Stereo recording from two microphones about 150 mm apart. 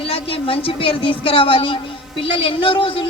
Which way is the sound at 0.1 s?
40° left (ahead or behind).